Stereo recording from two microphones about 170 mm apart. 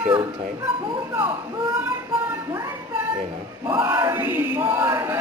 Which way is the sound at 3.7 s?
15° right (ahead or behind).